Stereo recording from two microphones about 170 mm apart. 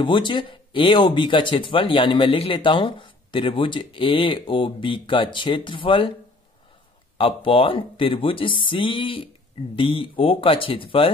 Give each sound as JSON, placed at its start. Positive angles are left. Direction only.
{"t": 0.0, "sound": "speech", "side_deg": 30}
{"t": 7.2, "sound": "speech", "side_deg": 30}